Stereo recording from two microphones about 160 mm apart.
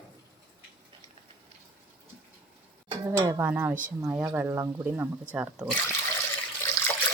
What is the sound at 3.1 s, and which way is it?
Speech, 15° right (ahead or behind).